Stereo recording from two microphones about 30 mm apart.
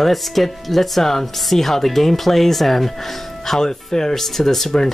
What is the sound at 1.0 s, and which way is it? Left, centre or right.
Speech, centre.